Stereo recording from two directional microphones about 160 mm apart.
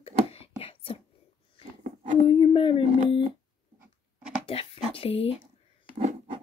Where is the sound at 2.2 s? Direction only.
35° left (ahead or behind).